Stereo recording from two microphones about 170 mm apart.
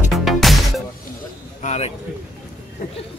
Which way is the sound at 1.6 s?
40° left (ahead or behind).